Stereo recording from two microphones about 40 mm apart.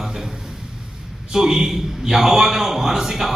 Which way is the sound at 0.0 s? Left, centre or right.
Centre.